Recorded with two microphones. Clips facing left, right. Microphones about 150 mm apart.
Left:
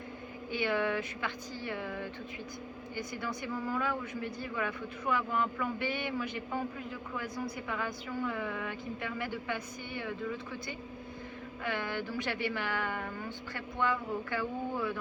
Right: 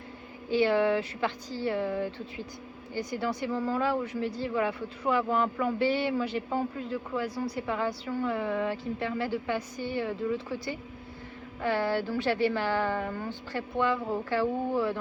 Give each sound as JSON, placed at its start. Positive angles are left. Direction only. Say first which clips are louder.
{"t": 0.6, "sound": "a woman's voice", "louder": "right 6 dB", "side_deg": -30}
{"t": 11.6, "sound": "a woman's voice", "louder": "right 8 dB", "side_deg": -35}